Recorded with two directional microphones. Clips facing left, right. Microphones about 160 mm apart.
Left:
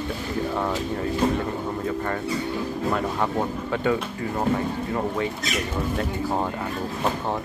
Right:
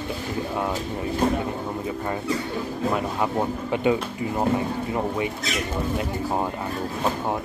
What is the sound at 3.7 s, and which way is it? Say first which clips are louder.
Speech: right 2 dB; 15° right (ahead or behind).